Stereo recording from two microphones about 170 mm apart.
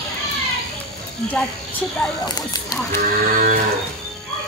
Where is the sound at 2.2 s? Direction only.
25° left (ahead or behind).